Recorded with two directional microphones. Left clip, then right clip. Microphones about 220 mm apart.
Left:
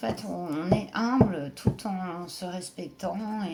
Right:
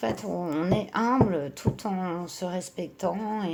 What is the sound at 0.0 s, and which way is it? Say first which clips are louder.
Speech: right 3 dB; 40° right (ahead or behind).